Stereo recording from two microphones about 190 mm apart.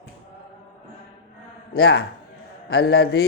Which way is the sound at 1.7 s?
60° left (ahead or behind).